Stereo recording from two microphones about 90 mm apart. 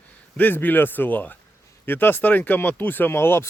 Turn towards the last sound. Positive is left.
turn(degrees=25)  # may be behind; listen again after turning